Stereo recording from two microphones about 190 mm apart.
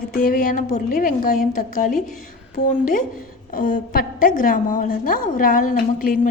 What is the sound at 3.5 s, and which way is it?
A woman's voice, 45° left (ahead or behind).